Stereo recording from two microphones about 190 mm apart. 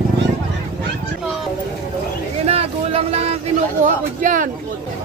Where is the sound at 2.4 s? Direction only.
30° right (ahead or behind).